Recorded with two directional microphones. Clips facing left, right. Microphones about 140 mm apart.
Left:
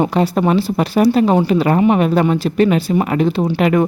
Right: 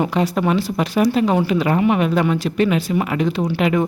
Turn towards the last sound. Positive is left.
turn(degrees=45)  # may be behind; listen again after turning